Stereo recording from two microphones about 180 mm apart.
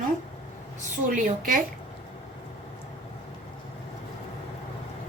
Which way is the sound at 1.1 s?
50° right (ahead or behind).